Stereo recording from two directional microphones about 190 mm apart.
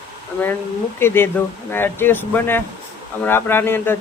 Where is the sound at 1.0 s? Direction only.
10° left (ahead or behind).